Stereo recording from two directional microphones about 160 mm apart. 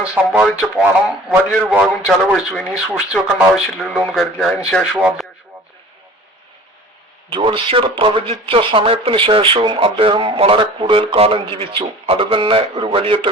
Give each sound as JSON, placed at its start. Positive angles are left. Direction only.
{"t": 0.0, "sound": "speech", "side_deg": -5}
{"t": 7.3, "sound": "speech", "side_deg": -30}